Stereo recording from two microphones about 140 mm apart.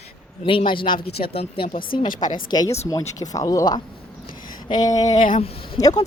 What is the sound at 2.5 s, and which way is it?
Speech, 30° left (ahead or behind).